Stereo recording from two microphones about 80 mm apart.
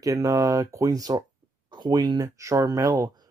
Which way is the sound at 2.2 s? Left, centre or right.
Right.